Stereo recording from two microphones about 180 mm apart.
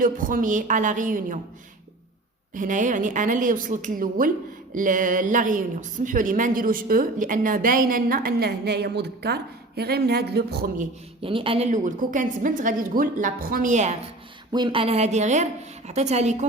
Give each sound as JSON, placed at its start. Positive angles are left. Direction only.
{"t": 0.0, "sound": "a woman's voice", "side_deg": -50}
{"t": 2.6, "sound": "a woman's voice", "side_deg": -45}
{"t": 11.2, "sound": "a woman's voice", "side_deg": -30}
{"t": 14.5, "sound": "a woman's voice", "side_deg": -25}